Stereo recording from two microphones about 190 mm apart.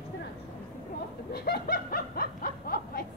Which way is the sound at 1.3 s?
55° left (ahead or behind).